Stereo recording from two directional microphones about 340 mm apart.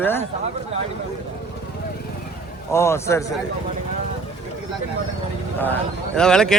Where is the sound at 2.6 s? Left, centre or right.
Centre.